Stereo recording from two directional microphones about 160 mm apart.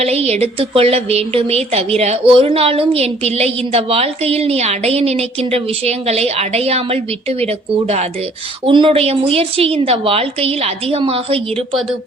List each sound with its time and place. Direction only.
0.0 s a woman's voice: 40° right (ahead or behind)